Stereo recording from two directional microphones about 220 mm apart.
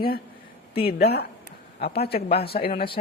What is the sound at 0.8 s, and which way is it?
A woman's voice, 45° left (ahead or behind).